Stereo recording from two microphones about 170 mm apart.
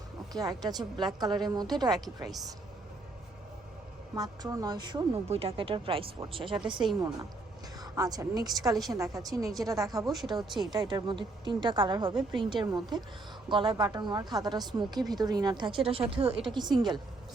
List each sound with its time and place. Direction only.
0.3 s a woman's voice: 20° right (ahead or behind)
4.1 s a woman's voice: 20° right (ahead or behind)
5.3 s a woman's voice: 35° right (ahead or behind)
10.1 s speech: centre (ahead or behind)
10.6 s a woman's voice: 25° right (ahead or behind)